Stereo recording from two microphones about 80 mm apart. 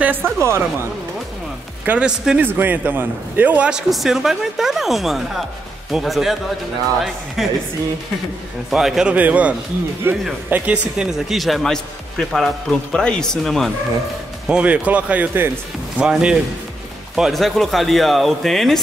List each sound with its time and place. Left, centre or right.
0.0 s a woman's voice: right
1.9 s speech: centre
2.4 s a man's voice: right
3.9 s speech: centre
7.4 s speech: centre
8.6 s speech: centre
9.1 s a man's voice: centre
10.5 s speech: centre
11.1 s speech: centre
14.5 s speech: centre